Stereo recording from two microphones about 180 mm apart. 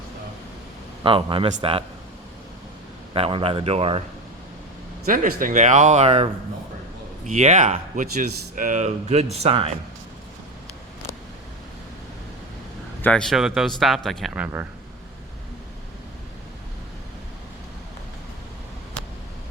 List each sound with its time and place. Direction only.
1.0 s speech: 30° right (ahead or behind)
3.1 s speech: 30° right (ahead or behind)
5.0 s speech: 50° right (ahead or behind)
7.3 s speech: 40° right (ahead or behind)
13.0 s speech: 5° left (ahead or behind); by 14.7 s 10° right (ahead or behind)